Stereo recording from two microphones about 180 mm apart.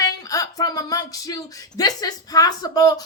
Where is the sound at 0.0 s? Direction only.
20° left (ahead or behind).